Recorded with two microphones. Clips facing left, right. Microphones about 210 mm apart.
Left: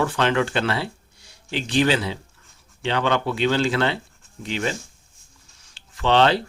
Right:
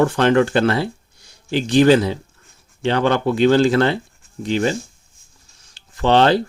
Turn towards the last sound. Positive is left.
turn(degrees=-40)  # may be behind; listen again after turning